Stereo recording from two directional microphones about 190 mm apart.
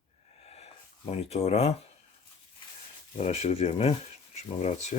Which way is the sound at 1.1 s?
35° left (ahead or behind).